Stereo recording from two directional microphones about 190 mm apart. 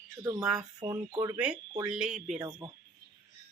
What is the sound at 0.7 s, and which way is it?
Speech, 20° right (ahead or behind).